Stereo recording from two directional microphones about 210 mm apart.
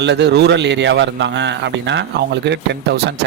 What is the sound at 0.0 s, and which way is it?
Speech, 55° right (ahead or behind).